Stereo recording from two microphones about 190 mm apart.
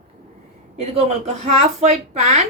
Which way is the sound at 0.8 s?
35° right (ahead or behind).